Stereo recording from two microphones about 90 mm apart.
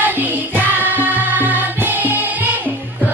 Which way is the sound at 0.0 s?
20° right (ahead or behind).